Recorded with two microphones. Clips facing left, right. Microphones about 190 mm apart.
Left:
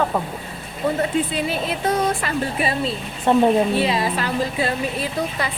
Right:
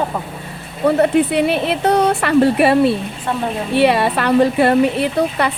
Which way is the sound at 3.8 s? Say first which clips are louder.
Right 7 dB; 65° right (ahead or behind).